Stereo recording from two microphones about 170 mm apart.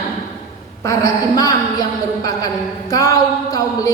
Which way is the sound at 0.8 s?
20° left (ahead or behind).